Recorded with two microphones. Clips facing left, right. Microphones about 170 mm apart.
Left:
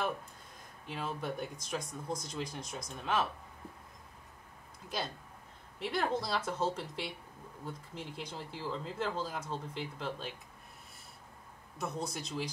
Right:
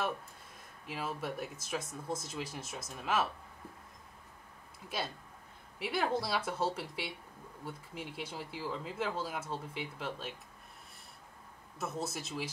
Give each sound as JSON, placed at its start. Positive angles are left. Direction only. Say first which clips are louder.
{"t": 0.8, "sound": "speech", "louder": "even", "side_deg": -5}
{"t": 4.8, "sound": "speech", "louder": "even", "side_deg": -5}
{"t": 11.8, "sound": "speech", "louder": "even", "side_deg": 0}